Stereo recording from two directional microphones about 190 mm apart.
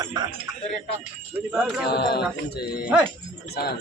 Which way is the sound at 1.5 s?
5° right (ahead or behind).